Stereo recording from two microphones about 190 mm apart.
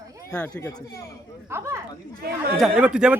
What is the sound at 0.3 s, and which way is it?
Speech, 10° left (ahead or behind).